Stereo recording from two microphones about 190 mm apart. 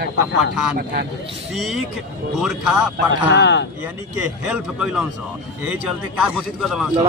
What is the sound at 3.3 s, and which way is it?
Speech, 70° left (ahead or behind).